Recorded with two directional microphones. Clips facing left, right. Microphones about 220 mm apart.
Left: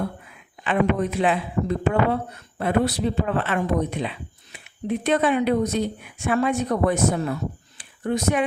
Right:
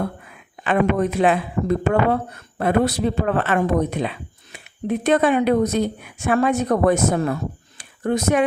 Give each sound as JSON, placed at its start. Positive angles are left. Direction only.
{"t": 0.6, "sound": "speech", "side_deg": -45}
{"t": 8.1, "sound": "speech", "side_deg": -45}